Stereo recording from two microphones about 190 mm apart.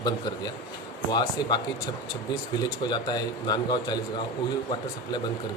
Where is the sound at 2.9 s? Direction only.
20° left (ahead or behind).